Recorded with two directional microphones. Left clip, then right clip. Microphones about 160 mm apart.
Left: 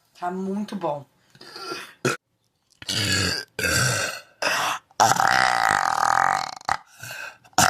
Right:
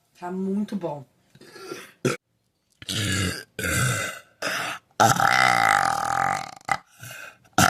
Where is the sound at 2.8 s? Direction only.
30° right (ahead or behind).